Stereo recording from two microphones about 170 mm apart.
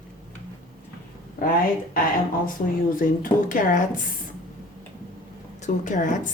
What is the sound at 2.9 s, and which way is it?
Speech, 50° left (ahead or behind).